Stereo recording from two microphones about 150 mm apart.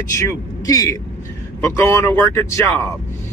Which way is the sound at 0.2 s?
20° left (ahead or behind).